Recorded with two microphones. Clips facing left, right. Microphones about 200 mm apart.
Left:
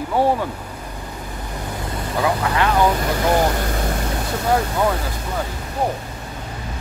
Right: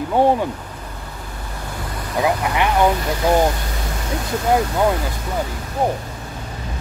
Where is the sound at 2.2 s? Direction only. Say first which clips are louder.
Right 1 dB; 15° right (ahead or behind).